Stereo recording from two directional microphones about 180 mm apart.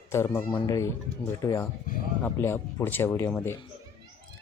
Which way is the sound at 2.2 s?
15° left (ahead or behind).